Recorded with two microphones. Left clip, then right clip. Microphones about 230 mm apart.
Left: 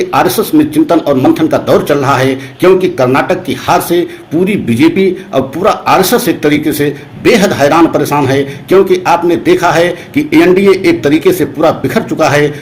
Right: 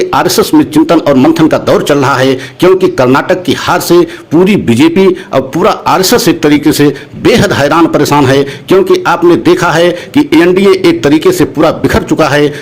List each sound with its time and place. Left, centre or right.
0.0 s a man's voice: right